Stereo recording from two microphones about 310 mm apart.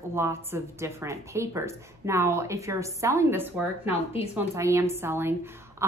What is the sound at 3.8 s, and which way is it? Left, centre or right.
Speech, centre.